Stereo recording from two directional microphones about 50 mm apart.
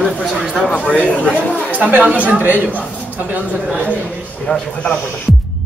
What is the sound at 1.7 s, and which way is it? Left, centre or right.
Speech, right.